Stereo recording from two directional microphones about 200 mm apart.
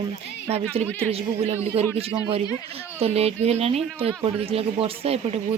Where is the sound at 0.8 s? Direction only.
10° left (ahead or behind).